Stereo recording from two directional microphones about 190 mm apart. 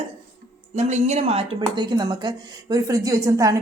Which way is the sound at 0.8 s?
35° right (ahead or behind).